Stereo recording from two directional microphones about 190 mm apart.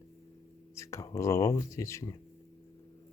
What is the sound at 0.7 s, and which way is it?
Speech, 15° left (ahead or behind).